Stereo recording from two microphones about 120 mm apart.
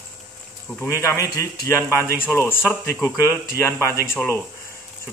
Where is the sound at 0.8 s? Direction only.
25° left (ahead or behind).